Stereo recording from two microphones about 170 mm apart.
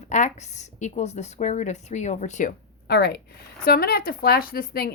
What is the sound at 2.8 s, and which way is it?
A woman's voice, 70° left (ahead or behind).